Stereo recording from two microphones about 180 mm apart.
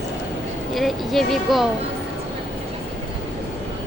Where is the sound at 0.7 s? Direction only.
Centre (ahead or behind).